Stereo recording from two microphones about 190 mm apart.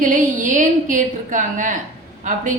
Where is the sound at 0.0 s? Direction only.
45° right (ahead or behind).